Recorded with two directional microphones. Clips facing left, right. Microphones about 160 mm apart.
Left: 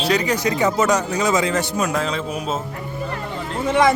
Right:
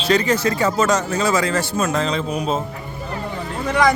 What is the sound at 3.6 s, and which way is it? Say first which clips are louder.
Speech: left 1 dB; 25° left (ahead or behind).